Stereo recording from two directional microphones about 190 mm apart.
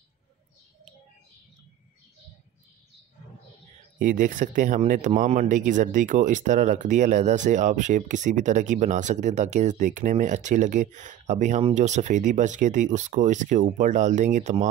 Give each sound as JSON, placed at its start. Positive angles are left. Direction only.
{"t": 4.0, "sound": "speech", "side_deg": -45}